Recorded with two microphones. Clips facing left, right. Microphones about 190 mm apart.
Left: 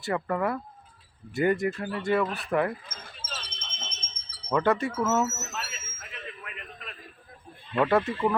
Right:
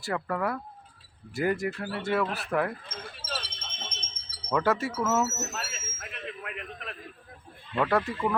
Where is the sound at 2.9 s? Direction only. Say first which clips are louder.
Right 5 dB; 65° right (ahead or behind).